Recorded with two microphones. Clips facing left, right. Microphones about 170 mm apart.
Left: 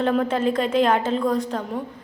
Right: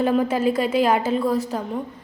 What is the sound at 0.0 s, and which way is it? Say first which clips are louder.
A woman's voice: right 1 dB; 5° right (ahead or behind).